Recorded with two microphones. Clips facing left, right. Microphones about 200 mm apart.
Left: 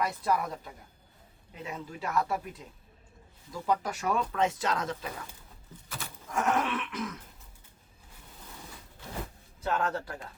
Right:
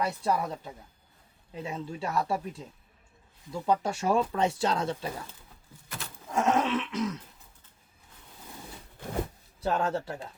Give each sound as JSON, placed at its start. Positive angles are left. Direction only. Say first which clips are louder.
{"t": 0.0, "sound": "speech", "louder": "right 1 dB", "side_deg": -30}
{"t": 6.3, "sound": "speech", "louder": "right 3 dB", "side_deg": -20}
{"t": 9.6, "sound": "speech", "louder": "right 2 dB", "side_deg": -30}